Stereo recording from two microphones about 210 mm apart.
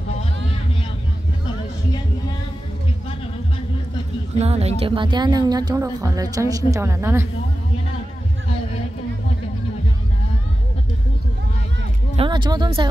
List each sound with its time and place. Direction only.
4.4 s a woman's voice: 30° right (ahead or behind); by 7.2 s 15° right (ahead or behind)
12.2 s speech: 20° right (ahead or behind)